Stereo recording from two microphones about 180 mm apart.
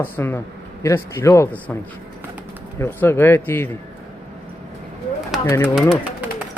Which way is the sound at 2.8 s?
10° left (ahead or behind).